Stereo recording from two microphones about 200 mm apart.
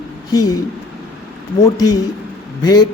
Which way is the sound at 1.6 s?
20° left (ahead or behind).